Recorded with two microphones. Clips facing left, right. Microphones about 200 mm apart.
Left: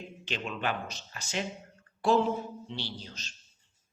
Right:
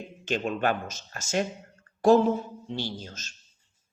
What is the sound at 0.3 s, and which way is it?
Speech, 45° right (ahead or behind).